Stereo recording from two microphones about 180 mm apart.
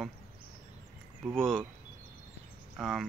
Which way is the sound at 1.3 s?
5° left (ahead or behind).